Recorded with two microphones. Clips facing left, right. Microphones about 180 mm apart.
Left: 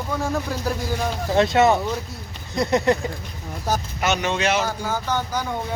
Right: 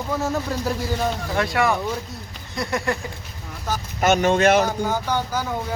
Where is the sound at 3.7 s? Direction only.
40° left (ahead or behind).